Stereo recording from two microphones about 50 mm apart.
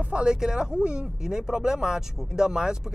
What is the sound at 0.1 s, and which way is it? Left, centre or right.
Speech, centre.